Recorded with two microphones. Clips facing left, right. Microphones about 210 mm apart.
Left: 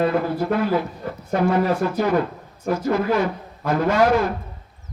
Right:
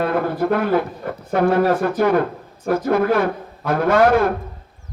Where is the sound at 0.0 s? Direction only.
55° right (ahead or behind).